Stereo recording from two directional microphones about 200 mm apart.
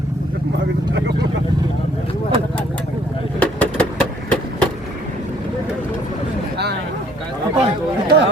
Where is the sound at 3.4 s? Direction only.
5° left (ahead or behind).